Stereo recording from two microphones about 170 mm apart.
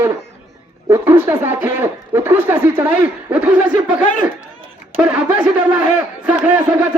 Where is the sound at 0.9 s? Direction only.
15° right (ahead or behind).